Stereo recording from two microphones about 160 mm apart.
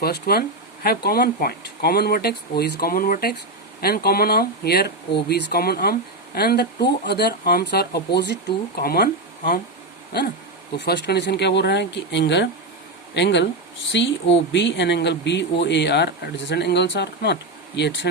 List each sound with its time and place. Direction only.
0.0 s speech: 75° left (ahead or behind)
10.8 s speech: 90° left